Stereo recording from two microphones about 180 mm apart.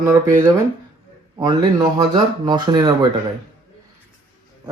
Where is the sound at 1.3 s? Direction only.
20° right (ahead or behind).